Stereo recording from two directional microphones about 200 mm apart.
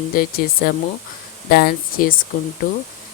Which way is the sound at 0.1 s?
45° left (ahead or behind).